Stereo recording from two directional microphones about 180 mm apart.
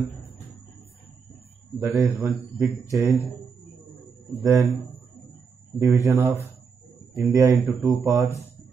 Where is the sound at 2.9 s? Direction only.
15° right (ahead or behind).